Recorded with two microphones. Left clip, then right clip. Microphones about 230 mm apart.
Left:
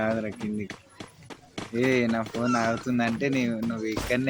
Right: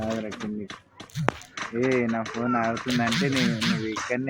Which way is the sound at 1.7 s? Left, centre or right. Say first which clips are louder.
Even; centre.